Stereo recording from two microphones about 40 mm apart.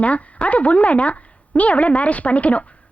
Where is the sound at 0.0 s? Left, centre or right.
Left.